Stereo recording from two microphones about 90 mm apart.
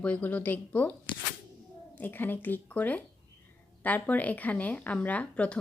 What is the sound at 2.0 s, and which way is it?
A woman's voice, 20° left (ahead or behind).